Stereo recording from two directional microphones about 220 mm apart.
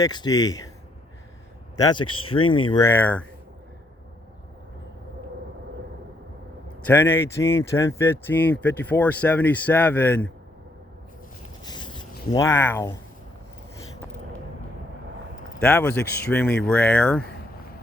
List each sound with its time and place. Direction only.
0.0 s speech: 20° left (ahead or behind)
1.8 s speech: 20° left (ahead or behind)
6.8 s speech: 10° left (ahead or behind)
11.6 s writing: 20° left (ahead or behind)
15.6 s speech: 5° left (ahead or behind)